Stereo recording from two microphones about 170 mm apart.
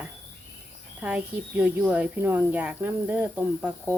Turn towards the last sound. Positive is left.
turn(degrees=-10)  # may be behind; listen again after turning